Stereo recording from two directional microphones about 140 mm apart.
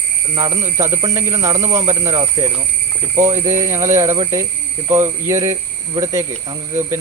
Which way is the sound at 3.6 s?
20° right (ahead or behind).